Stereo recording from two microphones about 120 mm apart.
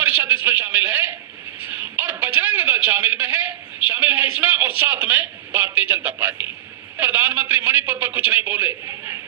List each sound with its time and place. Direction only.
0.0 s a man's voice: 15° right (ahead or behind)
1.7 s a sound: 15° right (ahead or behind)
3.9 s a man's voice: 15° right (ahead or behind)